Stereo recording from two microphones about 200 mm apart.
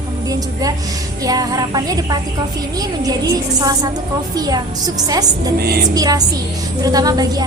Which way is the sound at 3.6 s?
20° right (ahead or behind).